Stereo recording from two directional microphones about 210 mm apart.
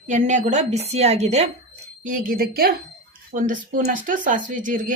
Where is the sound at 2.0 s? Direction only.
40° right (ahead or behind).